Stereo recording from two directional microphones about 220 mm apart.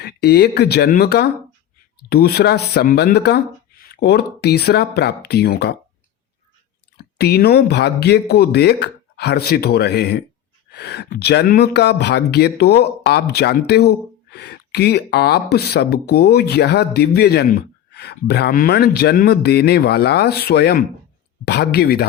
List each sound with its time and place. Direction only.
0.0 s speech: 45° left (ahead or behind)
6.9 s speech: 45° left (ahead or behind)